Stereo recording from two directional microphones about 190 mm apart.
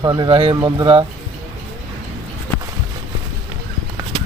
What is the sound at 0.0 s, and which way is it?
Speech, 20° right (ahead or behind).